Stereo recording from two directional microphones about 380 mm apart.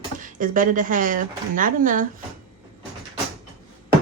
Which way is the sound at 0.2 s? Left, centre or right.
Right.